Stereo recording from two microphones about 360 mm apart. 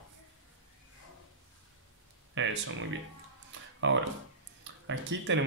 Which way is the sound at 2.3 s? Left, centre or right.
Right.